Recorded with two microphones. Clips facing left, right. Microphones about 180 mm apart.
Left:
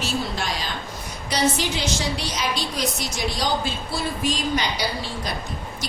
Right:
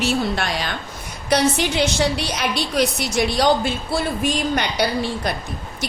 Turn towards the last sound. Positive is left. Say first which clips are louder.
# right 7 dB
turn(degrees=-60)  # may be behind; listen again after turning